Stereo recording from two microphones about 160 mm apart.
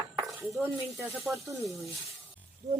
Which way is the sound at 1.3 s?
5° right (ahead or behind).